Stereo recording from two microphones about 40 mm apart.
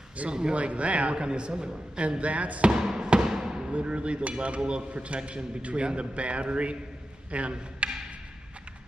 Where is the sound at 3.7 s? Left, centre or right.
Right.